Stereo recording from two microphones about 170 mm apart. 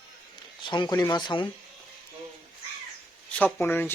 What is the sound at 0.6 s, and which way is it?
Speech, 25° left (ahead or behind).